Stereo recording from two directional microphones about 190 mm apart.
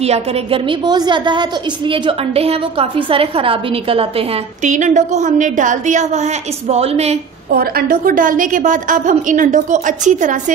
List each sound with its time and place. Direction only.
0.0 s a woman's voice: 30° right (ahead or behind)
4.6 s a woman's voice: 40° right (ahead or behind)
7.5 s a woman's voice: 50° right (ahead or behind)